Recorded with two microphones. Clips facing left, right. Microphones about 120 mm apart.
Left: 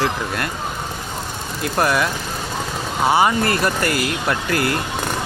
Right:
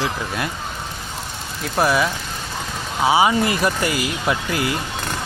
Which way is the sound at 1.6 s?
5° right (ahead or behind).